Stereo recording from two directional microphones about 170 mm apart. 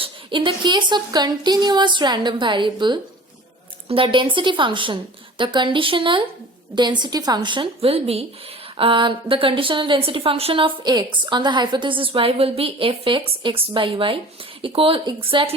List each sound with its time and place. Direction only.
0.0 s a woman's voice: 30° right (ahead or behind)